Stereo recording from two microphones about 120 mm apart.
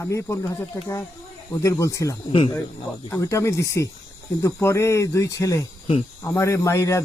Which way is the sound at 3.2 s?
25° left (ahead or behind).